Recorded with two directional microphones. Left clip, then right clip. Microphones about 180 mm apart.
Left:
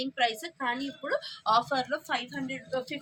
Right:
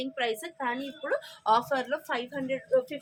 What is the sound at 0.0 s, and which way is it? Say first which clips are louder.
Speech: left 2 dB; 35° right (ahead or behind).